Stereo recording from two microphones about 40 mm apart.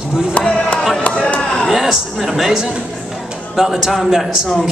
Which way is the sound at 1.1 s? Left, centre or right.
Left.